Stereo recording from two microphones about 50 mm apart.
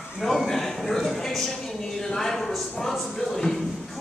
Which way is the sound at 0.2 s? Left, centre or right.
Centre.